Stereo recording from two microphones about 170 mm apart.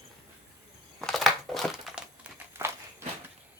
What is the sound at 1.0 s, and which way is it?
Crumpling, centre (ahead or behind).